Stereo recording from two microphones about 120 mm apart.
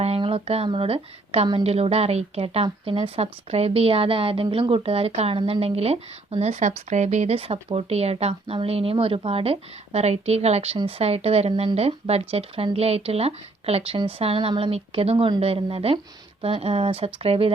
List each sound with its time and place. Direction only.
0.0 s a woman's voice: 55° right (ahead or behind)